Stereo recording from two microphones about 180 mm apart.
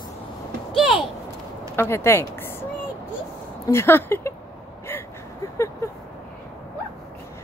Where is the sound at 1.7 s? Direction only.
15° left (ahead or behind).